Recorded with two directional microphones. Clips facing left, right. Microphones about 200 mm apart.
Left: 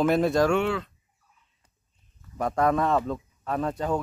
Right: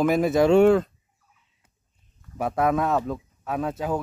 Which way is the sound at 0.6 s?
45° right (ahead or behind).